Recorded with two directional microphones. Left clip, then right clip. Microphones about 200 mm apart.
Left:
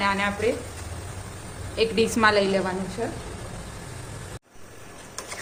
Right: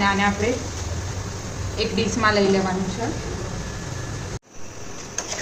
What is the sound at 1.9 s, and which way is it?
Speech, 55° left (ahead or behind).